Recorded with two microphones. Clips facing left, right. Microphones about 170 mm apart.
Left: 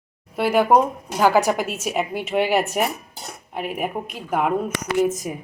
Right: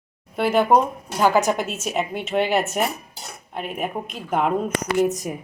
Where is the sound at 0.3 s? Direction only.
10° left (ahead or behind).